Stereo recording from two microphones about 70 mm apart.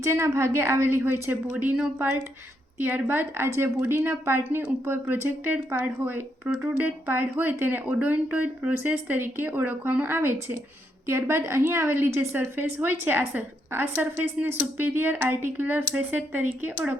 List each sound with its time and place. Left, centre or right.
0.0 s speech: right
2.7 s speech: right